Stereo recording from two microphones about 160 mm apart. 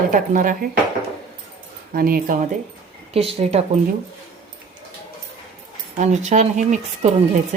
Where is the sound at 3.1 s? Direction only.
40° right (ahead or behind).